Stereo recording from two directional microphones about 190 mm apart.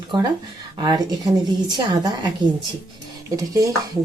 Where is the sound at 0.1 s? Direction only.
25° right (ahead or behind).